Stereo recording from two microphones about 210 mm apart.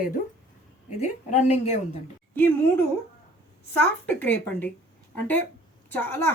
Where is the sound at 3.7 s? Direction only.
10° left (ahead or behind).